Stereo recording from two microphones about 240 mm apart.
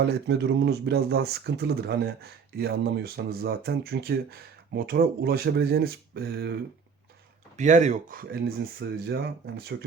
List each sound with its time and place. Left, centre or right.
0.0 s speech: right
7.5 s speech: right